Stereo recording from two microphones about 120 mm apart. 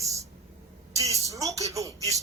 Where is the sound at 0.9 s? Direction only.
30° right (ahead or behind).